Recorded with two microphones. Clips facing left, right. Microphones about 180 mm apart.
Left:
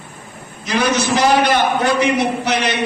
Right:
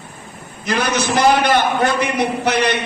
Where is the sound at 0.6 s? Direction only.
55° right (ahead or behind).